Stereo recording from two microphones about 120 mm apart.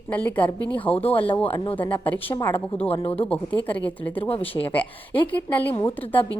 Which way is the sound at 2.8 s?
55° left (ahead or behind).